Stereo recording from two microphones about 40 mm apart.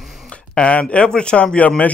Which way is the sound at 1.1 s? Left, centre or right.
Left.